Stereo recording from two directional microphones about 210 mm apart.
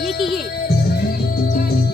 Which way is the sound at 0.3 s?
50° left (ahead or behind).